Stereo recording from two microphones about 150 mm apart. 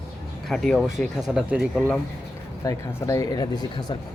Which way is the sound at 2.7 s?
20° left (ahead or behind).